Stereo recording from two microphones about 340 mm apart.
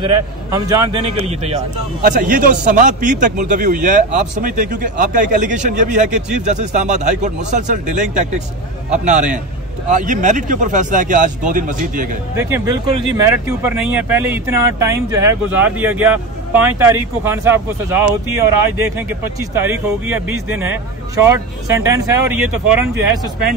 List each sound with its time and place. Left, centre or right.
0.0 s a man's voice: centre
12.4 s speech: centre